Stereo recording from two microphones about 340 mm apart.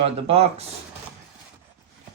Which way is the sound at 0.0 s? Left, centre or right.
Centre.